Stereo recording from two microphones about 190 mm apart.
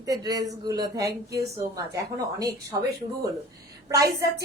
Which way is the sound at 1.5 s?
15° right (ahead or behind).